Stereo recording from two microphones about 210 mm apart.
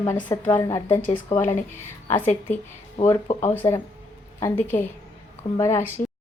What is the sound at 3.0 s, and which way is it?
Speech, 25° left (ahead or behind).